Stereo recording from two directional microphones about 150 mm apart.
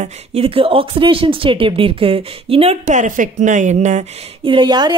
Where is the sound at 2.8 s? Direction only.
55° right (ahead or behind).